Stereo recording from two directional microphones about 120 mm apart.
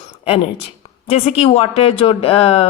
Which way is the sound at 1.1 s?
55° left (ahead or behind).